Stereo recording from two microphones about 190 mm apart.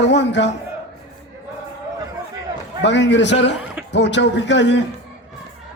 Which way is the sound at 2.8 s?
70° left (ahead or behind).